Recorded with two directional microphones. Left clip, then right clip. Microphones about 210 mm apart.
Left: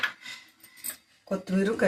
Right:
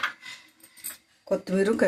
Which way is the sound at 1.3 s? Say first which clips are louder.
Right 4 dB; 40° right (ahead or behind).